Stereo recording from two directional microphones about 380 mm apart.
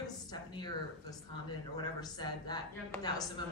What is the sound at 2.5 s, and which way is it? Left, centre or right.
Speech, centre.